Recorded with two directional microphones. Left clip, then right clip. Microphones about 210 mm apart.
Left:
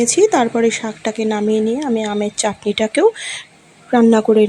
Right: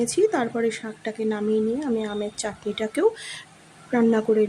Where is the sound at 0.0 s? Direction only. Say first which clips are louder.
Left 8 dB; 25° left (ahead or behind).